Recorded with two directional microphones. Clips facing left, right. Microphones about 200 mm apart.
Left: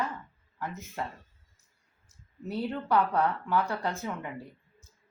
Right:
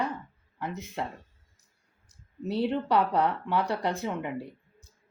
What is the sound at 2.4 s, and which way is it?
Speech, 70° right (ahead or behind).